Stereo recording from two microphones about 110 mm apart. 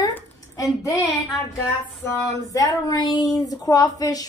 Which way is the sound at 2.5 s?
35° left (ahead or behind).